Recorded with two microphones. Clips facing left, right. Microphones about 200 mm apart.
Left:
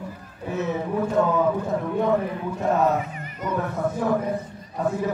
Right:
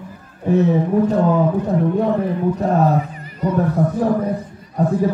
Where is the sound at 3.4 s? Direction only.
35° right (ahead or behind).